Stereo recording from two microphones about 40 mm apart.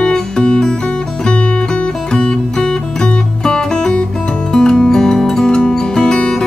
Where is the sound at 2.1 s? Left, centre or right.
Left.